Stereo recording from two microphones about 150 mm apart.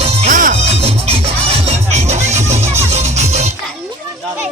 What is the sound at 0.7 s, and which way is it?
Music, 40° right (ahead or behind).